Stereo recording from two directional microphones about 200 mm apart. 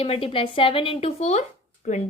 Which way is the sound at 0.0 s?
30° left (ahead or behind).